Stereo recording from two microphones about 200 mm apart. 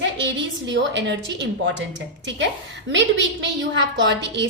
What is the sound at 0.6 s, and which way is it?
A woman's voice, 65° right (ahead or behind).